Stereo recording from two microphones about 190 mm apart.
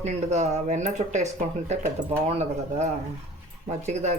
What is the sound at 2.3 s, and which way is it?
A woman's voice, 35° right (ahead or behind).